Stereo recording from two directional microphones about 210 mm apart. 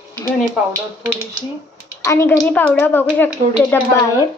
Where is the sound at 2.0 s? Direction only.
15° left (ahead or behind).